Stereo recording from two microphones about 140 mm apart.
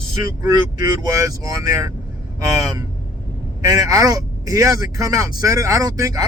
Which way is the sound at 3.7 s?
25° right (ahead or behind).